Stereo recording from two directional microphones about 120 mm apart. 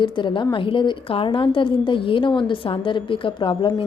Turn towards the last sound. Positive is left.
turn(degrees=40)  # may be behind; listen again after turning